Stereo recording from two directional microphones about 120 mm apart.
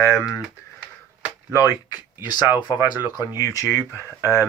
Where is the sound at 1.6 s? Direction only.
30° left (ahead or behind).